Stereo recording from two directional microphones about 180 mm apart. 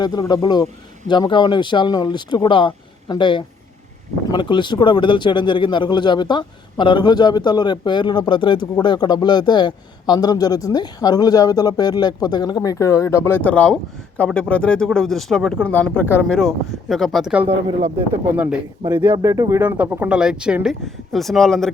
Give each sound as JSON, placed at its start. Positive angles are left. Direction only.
{"t": 0.0, "sound": "speech", "side_deg": 20}
{"t": 16.4, "sound": "speech", "side_deg": 0}
{"t": 17.4, "sound": "speech", "side_deg": -30}
{"t": 19.1, "sound": "speech", "side_deg": -15}